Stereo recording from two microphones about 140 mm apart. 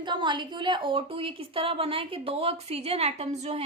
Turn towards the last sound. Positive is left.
turn(degrees=-50)  # may be behind; listen again after turning